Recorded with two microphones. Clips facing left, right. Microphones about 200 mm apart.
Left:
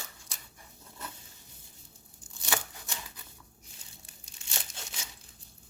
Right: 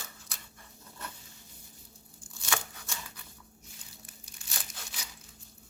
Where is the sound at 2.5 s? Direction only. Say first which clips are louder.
Left 1 dB; 20° left (ahead or behind).